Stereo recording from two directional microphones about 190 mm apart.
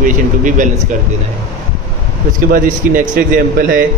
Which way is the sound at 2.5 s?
45° right (ahead or behind).